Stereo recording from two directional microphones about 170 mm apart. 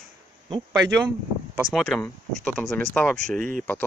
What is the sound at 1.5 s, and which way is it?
Speech, centre (ahead or behind).